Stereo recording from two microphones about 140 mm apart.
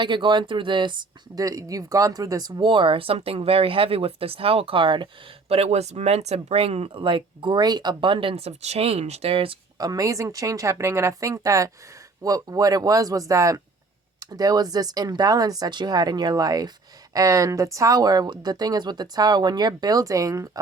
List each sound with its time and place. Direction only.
0.0 s speech: 35° right (ahead or behind)
5.5 s speech: 45° right (ahead or behind)
9.7 s speech: 25° right (ahead or behind)